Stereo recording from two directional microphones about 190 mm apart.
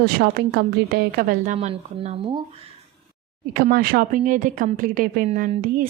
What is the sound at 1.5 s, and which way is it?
Speech, 35° right (ahead or behind).